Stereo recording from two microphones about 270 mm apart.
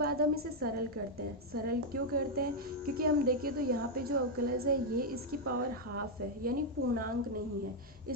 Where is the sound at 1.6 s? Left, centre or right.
Right.